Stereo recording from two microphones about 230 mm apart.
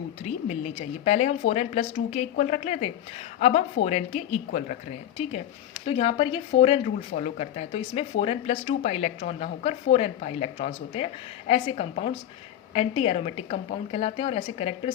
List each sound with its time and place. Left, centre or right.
0.4 s speech: left